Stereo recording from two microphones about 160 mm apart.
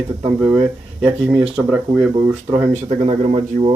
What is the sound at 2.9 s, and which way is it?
Speech, 40° right (ahead or behind).